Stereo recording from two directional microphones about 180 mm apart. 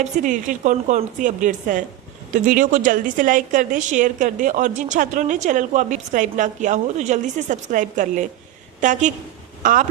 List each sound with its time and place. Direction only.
0.0 s a woman's voice: 45° right (ahead or behind)